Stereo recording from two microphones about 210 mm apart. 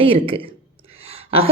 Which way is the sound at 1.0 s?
30° right (ahead or behind).